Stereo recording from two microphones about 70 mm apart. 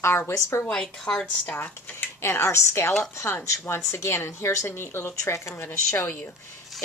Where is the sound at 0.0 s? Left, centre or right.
Left.